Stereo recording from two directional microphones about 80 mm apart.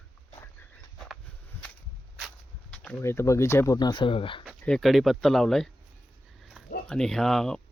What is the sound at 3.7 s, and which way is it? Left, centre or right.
Speech, left.